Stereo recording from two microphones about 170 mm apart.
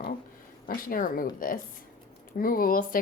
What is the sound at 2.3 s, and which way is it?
Speech, 55° left (ahead or behind).